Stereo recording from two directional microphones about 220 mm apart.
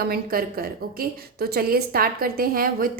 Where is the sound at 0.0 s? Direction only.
45° right (ahead or behind).